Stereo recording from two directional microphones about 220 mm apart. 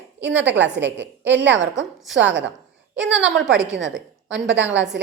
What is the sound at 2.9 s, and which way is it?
A woman's voice, 55° right (ahead or behind).